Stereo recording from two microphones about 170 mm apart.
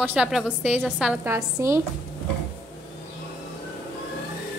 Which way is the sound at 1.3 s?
15° right (ahead or behind).